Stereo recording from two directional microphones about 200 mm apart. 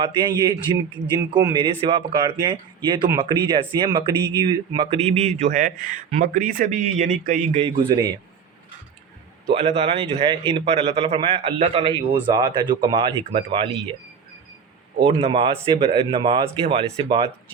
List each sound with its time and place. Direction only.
0.0 s speech: 25° right (ahead or behind)
5.0 s a man's voice: 40° right (ahead or behind); by 8.1 s 20° right (ahead or behind)
9.6 s speech: 30° right (ahead or behind)
15.0 s speech: 25° right (ahead or behind)